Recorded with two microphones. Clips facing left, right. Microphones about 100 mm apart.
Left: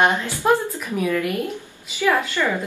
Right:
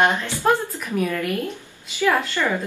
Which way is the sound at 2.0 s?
15° left (ahead or behind).